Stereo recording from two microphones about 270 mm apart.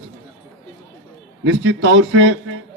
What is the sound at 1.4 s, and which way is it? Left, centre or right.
A man's voice, right.